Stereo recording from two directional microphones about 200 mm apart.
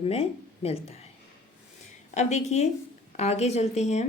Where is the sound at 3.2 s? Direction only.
35° left (ahead or behind).